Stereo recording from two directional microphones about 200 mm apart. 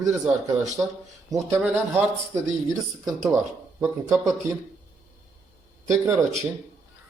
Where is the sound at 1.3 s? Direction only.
15° right (ahead or behind).